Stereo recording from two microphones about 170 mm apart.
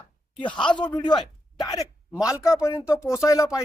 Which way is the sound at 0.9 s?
25° left (ahead or behind).